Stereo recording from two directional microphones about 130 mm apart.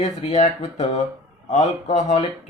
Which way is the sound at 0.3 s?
65° left (ahead or behind).